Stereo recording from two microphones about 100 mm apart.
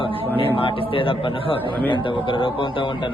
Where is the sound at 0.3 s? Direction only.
65° left (ahead or behind).